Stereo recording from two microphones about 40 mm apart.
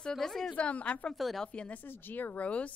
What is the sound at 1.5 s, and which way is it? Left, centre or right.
Speech, left.